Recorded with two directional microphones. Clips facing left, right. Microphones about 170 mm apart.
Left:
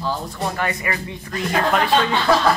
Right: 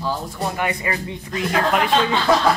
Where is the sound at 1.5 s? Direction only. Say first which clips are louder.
Even; centre (ahead or behind).